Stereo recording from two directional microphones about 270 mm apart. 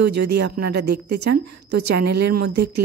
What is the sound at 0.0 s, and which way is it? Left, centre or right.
Speech, right.